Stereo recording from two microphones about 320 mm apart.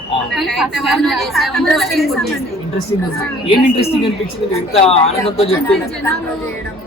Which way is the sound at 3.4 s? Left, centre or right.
Centre.